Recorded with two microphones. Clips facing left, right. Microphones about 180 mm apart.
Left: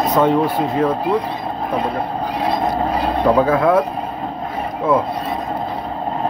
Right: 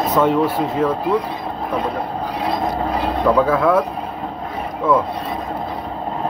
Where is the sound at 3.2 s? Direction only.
25° left (ahead or behind).